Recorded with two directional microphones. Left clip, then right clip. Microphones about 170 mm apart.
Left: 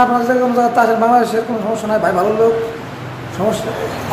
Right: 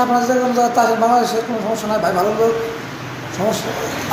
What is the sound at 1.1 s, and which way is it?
Speech, 35° left (ahead or behind).